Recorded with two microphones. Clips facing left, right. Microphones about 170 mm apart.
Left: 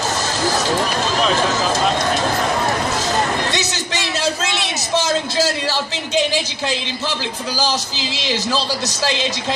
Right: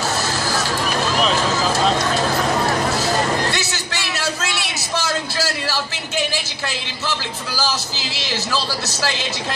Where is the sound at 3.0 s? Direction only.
20° left (ahead or behind).